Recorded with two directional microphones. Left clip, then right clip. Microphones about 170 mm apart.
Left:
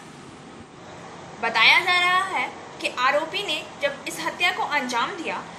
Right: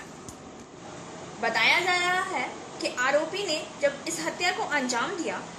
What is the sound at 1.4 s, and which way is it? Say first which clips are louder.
A woman's voice: left 5 dB; centre (ahead or behind).